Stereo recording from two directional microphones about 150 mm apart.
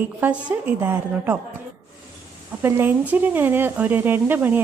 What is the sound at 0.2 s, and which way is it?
A woman's voice, 10° right (ahead or behind).